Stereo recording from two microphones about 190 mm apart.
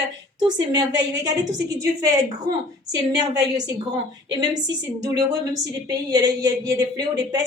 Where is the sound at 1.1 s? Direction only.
20° right (ahead or behind).